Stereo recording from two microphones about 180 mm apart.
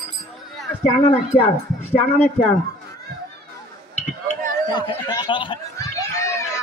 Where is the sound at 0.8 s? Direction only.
40° left (ahead or behind).